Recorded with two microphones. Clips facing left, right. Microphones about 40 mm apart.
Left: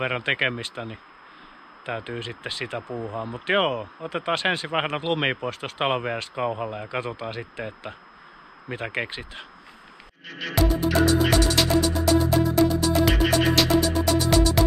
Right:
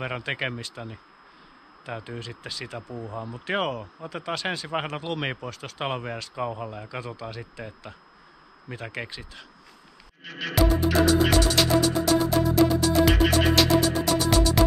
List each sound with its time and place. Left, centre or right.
0.0 s speech: left
10.2 s music: centre